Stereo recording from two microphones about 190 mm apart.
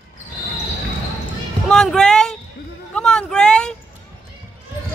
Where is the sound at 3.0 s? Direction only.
5° left (ahead or behind).